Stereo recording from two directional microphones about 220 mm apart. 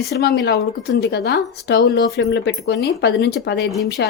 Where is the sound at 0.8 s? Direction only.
45° left (ahead or behind).